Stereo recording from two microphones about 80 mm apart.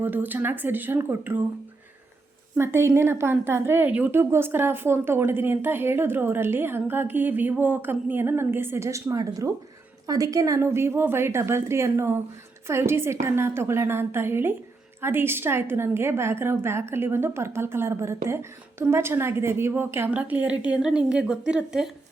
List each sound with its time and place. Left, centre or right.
0.0 s a woman's voice: right
2.6 s a woman's voice: right
4.2 s a woman's voice: right
10.6 s a woman's voice: right
20.1 s a woman's voice: centre